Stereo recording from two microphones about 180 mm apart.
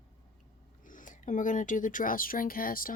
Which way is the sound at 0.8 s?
45° left (ahead or behind).